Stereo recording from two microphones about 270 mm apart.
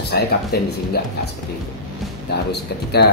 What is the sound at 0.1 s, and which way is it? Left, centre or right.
Speech, left.